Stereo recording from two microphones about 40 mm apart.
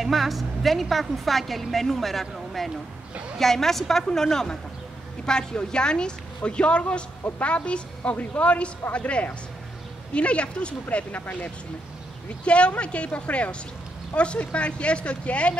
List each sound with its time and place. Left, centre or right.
0.0 s a woman's voice: centre; by 11.1 s left
11.1 s speech: left
12.4 s speech: left